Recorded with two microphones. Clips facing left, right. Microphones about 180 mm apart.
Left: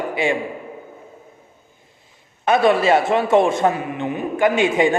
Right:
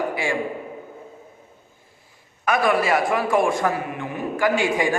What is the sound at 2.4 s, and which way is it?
A man's voice, 25° left (ahead or behind).